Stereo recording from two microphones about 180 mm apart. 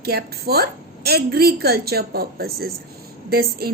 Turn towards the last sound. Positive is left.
turn(degrees=-60)  # may be behind; listen again after turning